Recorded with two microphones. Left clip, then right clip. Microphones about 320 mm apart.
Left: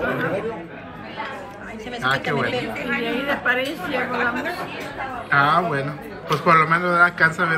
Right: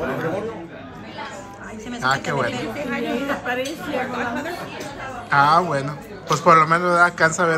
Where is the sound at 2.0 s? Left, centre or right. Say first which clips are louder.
Right 1 dB; centre.